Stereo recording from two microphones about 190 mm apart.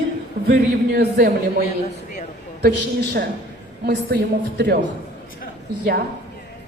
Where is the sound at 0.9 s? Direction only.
55° right (ahead or behind).